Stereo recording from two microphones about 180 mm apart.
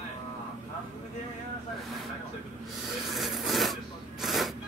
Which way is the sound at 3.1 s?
Centre (ahead or behind).